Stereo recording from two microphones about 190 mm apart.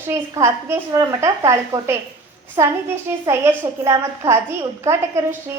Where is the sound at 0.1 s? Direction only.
15° right (ahead or behind).